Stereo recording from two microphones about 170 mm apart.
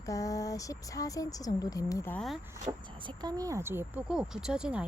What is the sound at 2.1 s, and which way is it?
Speech, centre (ahead or behind).